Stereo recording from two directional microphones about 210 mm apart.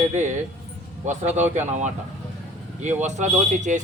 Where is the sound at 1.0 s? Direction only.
35° right (ahead or behind).